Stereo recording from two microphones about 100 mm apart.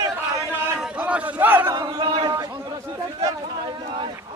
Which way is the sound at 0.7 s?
10° right (ahead or behind).